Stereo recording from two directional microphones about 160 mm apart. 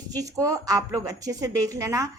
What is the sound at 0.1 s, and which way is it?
A woman's voice, 20° right (ahead or behind).